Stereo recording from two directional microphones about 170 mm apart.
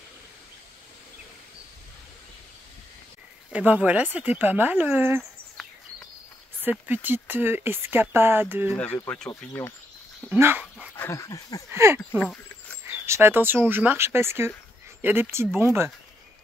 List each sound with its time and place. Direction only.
3.5 s speech: 5° right (ahead or behind)
6.6 s speech: 10° right (ahead or behind)
8.7 s speech: 10° left (ahead or behind)
10.3 s speech: 10° right (ahead or behind)
11.0 s dog: 20° left (ahead or behind)
11.7 s speech: 15° right (ahead or behind)